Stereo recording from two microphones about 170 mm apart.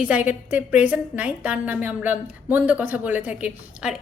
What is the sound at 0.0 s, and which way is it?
A woman's voice, 10° right (ahead or behind).